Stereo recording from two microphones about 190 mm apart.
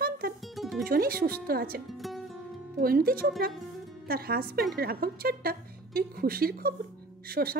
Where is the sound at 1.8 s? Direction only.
Centre (ahead or behind).